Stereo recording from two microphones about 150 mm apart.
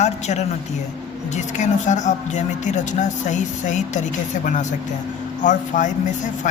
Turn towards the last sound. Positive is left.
turn(degrees=55)  # may be behind; listen again after turning